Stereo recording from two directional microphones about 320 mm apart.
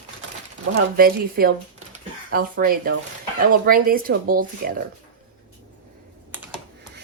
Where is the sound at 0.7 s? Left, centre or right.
Right.